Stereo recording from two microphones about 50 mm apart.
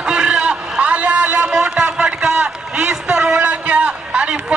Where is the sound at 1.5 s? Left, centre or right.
Right.